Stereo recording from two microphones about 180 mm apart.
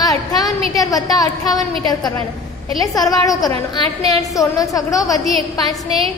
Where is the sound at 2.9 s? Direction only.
20° left (ahead or behind).